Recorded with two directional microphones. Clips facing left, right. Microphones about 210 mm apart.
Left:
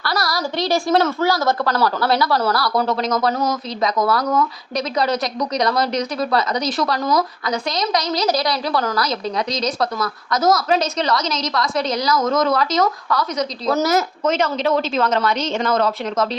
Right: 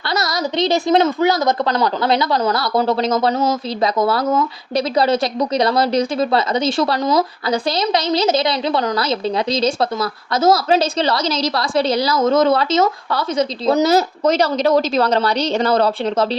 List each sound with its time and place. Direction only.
0.1 s a woman's voice: 20° right (ahead or behind)